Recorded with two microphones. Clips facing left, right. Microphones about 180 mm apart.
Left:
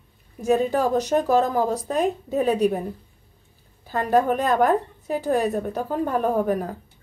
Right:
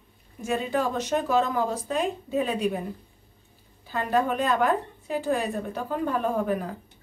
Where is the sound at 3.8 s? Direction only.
40° left (ahead or behind).